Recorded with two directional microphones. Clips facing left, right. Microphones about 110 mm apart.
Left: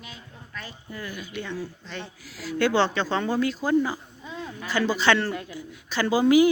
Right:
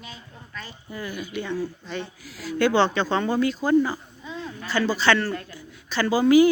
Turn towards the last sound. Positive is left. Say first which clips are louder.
# right 2 dB
turn(degrees=15)  # may be behind; listen again after turning